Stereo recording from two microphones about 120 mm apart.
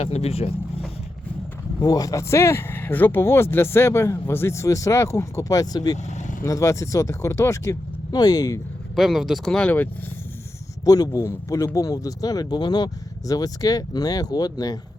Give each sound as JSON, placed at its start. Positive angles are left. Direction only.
{"t": 0.0, "sound": "speech", "side_deg": 60}
{"t": 1.8, "sound": "speech", "side_deg": 30}
{"t": 6.1, "sound": "vehicle", "side_deg": 75}
{"t": 6.4, "sound": "speech", "side_deg": 25}
{"t": 9.0, "sound": "speech", "side_deg": -5}
{"t": 10.8, "sound": "speech", "side_deg": 30}